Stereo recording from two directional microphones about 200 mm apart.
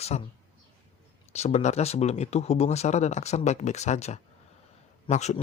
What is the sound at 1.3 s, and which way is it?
Speech, 35° left (ahead or behind).